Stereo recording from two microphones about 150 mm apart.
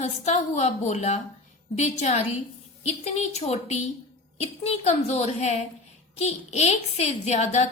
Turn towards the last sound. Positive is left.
turn(degrees=45)  # may be behind; listen again after turning